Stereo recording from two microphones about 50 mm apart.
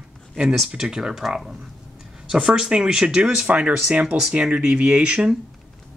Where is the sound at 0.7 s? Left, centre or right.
Centre.